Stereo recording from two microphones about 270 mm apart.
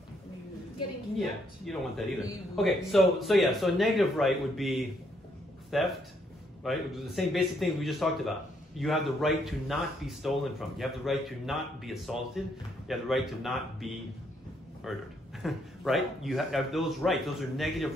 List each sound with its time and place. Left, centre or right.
1.2 s a man's voice: centre
14.9 s a man's voice: centre